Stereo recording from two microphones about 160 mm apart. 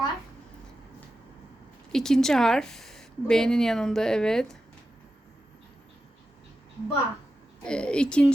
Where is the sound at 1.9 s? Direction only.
5° left (ahead or behind).